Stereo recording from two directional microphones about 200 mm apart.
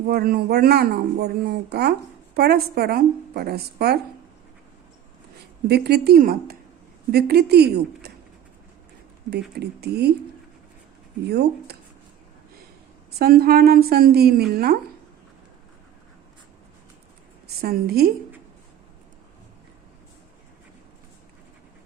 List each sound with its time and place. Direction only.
0.1 s speech: 50° right (ahead or behind)
5.6 s speech: 55° right (ahead or behind)
9.6 s speech: 55° right (ahead or behind)
11.3 s speech: 55° right (ahead or behind)
13.1 s speech: 50° right (ahead or behind)
17.6 s speech: 50° right (ahead or behind)